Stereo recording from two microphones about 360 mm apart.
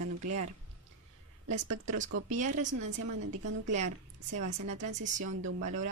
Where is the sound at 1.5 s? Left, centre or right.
Right.